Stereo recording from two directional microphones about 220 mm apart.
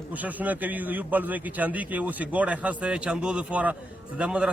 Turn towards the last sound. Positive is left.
turn(degrees=-5)  # may be behind; listen again after turning